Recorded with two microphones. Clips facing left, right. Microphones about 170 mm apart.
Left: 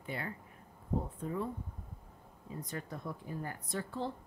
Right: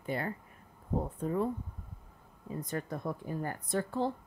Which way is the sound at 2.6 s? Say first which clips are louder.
Right 6 dB; 50° right (ahead or behind).